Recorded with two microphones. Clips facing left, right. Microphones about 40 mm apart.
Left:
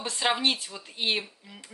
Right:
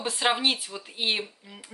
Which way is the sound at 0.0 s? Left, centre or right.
Centre.